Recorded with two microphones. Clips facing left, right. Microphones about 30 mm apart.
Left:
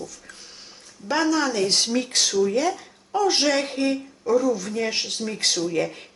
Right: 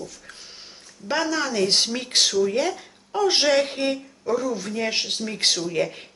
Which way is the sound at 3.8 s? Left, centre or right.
Right.